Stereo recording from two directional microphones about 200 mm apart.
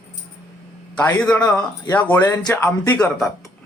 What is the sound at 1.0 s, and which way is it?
Speech, 5° left (ahead or behind).